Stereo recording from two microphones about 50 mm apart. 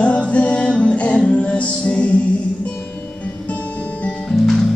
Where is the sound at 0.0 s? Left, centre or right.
Left.